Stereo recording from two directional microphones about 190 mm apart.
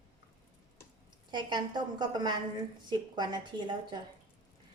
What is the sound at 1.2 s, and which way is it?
A woman's voice, 25° right (ahead or behind).